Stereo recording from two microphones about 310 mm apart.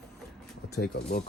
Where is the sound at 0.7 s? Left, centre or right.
Left.